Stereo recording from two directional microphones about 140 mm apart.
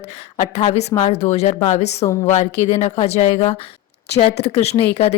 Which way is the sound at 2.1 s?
20° left (ahead or behind).